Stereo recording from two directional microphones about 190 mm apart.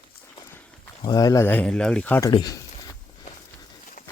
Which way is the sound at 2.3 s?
20° left (ahead or behind).